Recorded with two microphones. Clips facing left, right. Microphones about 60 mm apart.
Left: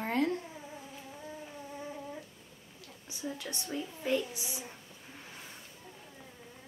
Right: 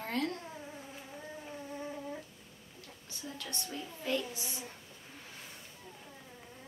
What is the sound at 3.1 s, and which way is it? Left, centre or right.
A child's voice, centre.